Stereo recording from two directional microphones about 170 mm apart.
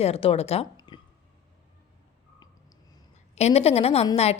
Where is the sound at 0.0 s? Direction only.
35° left (ahead or behind).